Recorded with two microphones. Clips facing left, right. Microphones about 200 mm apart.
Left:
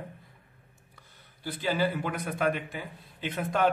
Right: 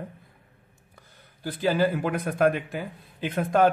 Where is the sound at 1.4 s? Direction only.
45° right (ahead or behind).